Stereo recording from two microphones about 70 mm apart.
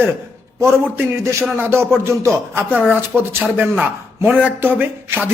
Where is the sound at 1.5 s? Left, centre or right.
Right.